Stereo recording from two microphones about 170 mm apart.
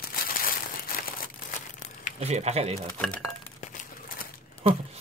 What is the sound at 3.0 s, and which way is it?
Speech, 5° left (ahead or behind).